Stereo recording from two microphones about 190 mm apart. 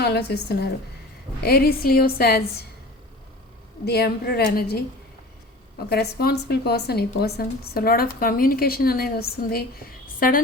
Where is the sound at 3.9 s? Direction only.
55° left (ahead or behind).